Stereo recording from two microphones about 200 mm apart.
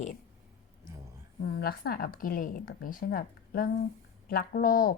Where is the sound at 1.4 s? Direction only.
50° left (ahead or behind).